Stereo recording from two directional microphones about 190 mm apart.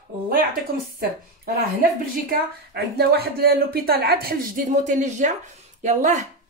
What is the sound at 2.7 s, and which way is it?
Speech, 55° right (ahead or behind).